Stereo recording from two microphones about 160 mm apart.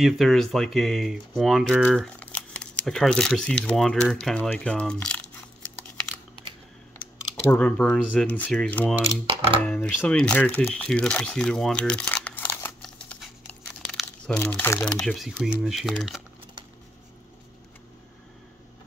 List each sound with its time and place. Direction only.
0.0 s speech: centre (ahead or behind)
2.1 s speech: 5° left (ahead or behind)
7.5 s speech: 10° left (ahead or behind)
9.3 s speech: 35° right (ahead or behind)
9.6 s a sound: 10° left (ahead or behind)
14.0 s speech: 10° left (ahead or behind)
14.9 s speech: centre (ahead or behind)